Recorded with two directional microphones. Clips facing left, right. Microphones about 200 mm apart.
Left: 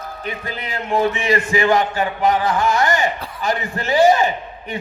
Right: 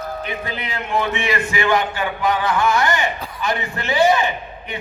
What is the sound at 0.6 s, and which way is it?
A man's voice, 40° left (ahead or behind).